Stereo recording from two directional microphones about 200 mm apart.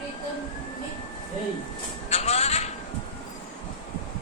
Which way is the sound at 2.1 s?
30° left (ahead or behind).